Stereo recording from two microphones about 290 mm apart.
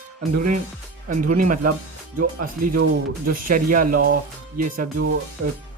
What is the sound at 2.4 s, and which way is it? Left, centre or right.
Speech, right.